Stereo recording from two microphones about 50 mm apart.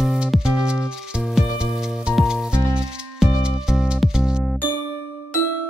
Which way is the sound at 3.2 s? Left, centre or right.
Centre.